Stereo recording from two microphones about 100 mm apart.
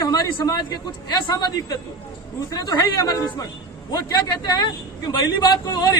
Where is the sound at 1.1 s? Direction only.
40° left (ahead or behind).